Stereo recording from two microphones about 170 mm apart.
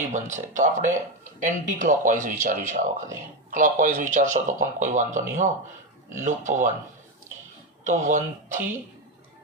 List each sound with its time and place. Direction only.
0.1 s speech: 45° right (ahead or behind)
7.9 s speech: 45° right (ahead or behind)